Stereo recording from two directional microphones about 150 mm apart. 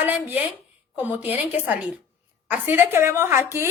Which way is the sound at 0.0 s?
10° right (ahead or behind).